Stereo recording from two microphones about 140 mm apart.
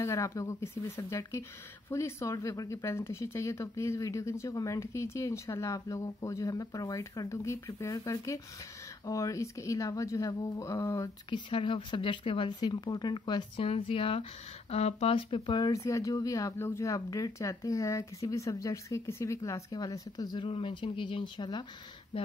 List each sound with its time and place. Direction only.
0.0 s speech: 20° left (ahead or behind)
11.2 s speech: 35° left (ahead or behind)
20.4 s speech: 40° left (ahead or behind)